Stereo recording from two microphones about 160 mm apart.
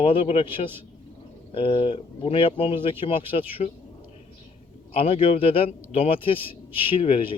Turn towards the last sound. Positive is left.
turn(degrees=35)  # may be behind; listen again after turning